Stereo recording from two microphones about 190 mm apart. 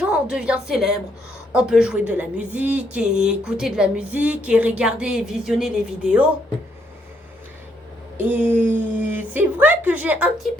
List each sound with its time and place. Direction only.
0.0 s a woman's voice: 5° right (ahead or behind)
8.2 s speech: 10° right (ahead or behind)